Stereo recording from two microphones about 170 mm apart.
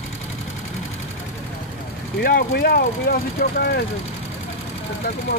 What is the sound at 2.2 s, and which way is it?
Speech, 60° left (ahead or behind).